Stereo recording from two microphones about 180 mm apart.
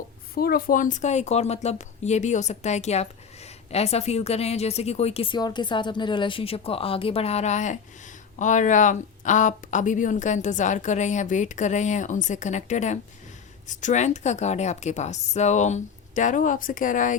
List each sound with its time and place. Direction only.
0.3 s speech: 55° left (ahead or behind)